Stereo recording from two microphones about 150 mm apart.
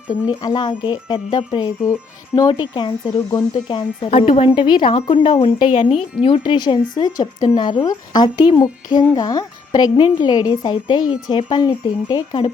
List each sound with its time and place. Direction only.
0.3 s a woman's voice: 30° left (ahead or behind)